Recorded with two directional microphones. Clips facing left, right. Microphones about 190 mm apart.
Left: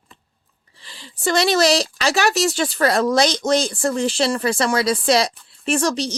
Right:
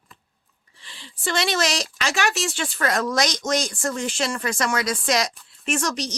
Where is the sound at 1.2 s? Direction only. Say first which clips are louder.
Left 7 dB; 40° left (ahead or behind).